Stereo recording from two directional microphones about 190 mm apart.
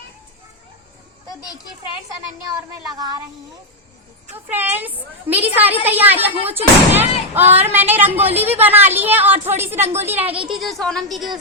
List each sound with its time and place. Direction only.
2.9 s speech: 20° right (ahead or behind)
4.4 s a woman's voice: 10° right (ahead or behind)